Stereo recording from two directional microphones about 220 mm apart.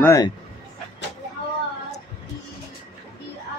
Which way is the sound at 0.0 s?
15° left (ahead or behind).